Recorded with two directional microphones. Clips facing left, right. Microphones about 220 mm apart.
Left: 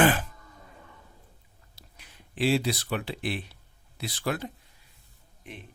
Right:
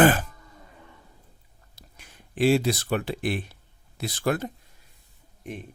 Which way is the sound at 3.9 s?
45° right (ahead or behind).